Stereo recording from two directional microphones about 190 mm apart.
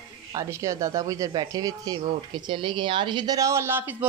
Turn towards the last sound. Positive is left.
turn(degrees=-10)  # may be behind; listen again after turning